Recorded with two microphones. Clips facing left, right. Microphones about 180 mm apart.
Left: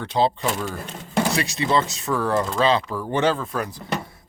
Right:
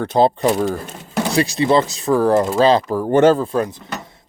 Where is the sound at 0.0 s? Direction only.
45° right (ahead or behind).